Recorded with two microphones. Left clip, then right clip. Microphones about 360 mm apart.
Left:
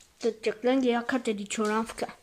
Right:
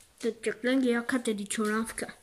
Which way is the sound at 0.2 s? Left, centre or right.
Centre.